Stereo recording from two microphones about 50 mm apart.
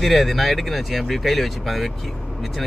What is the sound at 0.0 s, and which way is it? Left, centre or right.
Speech, centre.